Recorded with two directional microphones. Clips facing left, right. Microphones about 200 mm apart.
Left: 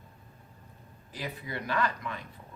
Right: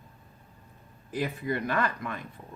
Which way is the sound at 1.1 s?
50° right (ahead or behind).